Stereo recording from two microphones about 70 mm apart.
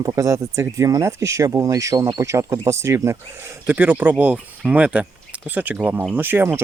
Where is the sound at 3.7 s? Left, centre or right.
Right.